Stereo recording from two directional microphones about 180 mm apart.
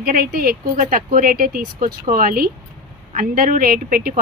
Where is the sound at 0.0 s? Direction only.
55° right (ahead or behind).